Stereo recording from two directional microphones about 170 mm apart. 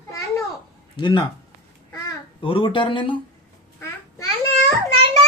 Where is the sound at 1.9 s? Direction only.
25° left (ahead or behind).